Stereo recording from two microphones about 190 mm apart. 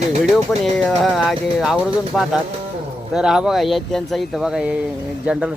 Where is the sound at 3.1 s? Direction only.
5° right (ahead or behind).